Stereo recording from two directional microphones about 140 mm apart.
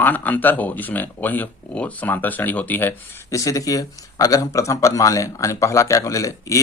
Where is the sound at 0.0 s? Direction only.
10° left (ahead or behind).